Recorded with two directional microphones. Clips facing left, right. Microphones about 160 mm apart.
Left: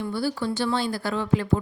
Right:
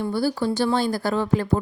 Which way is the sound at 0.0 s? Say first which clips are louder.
Right 4 dB; 40° right (ahead or behind).